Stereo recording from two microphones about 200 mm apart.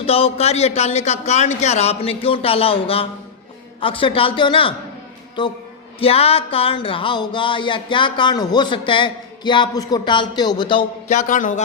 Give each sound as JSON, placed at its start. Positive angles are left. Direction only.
{"t": 0.0, "sound": "speech", "side_deg": 30}
{"t": 3.8, "sound": "a sound", "side_deg": 25}
{"t": 11.1, "sound": "speech", "side_deg": 40}